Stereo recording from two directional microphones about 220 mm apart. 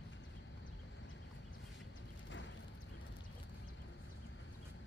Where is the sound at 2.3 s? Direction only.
55° left (ahead or behind).